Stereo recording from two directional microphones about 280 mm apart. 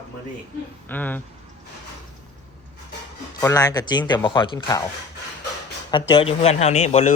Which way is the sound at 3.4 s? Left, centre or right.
Centre.